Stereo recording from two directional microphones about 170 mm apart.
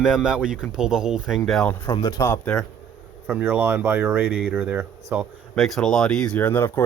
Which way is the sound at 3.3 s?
10° right (ahead or behind).